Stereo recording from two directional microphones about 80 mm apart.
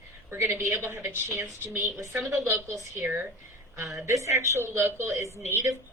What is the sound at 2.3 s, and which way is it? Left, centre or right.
Speech, right.